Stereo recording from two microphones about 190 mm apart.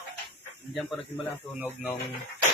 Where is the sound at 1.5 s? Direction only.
10° right (ahead or behind).